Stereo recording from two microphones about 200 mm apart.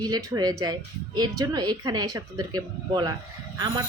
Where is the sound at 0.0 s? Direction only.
20° right (ahead or behind).